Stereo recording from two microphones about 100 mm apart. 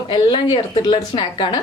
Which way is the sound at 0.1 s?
60° left (ahead or behind).